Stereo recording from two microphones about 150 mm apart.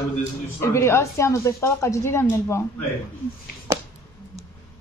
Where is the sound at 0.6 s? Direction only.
15° left (ahead or behind).